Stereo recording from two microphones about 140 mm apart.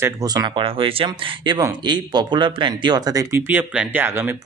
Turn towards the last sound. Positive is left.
turn(degrees=-15)  # may be behind; listen again after turning